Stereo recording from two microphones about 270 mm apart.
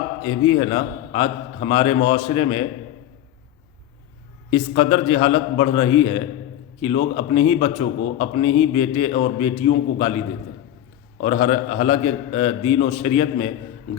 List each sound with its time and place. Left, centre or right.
0.3 s a man's voice: centre
4.5 s a man's voice: left
11.2 s a man's voice: left